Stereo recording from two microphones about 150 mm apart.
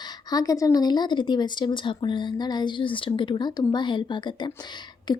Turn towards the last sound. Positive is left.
turn(degrees=30)  # may be behind; listen again after turning